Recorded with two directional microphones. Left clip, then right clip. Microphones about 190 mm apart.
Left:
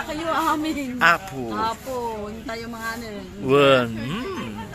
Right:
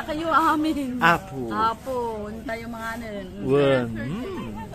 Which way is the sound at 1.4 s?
30° right (ahead or behind).